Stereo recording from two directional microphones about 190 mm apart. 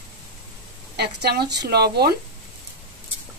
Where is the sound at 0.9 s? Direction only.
60° right (ahead or behind).